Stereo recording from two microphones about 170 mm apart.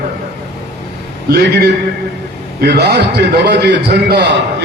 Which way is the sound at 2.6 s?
75° right (ahead or behind).